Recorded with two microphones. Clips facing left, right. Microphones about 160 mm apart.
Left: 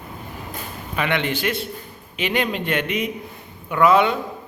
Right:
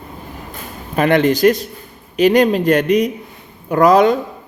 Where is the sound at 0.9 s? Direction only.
40° right (ahead or behind).